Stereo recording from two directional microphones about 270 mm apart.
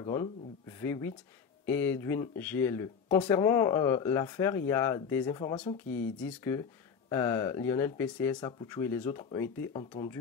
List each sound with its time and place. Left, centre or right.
0.0 s speech: centre
6.1 s speech: centre